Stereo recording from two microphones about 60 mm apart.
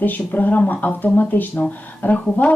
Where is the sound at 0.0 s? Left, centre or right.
Left.